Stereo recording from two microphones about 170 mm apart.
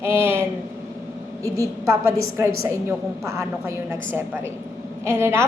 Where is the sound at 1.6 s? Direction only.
15° right (ahead or behind).